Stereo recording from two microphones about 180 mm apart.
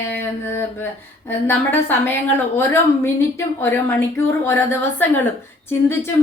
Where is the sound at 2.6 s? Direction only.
15° left (ahead or behind).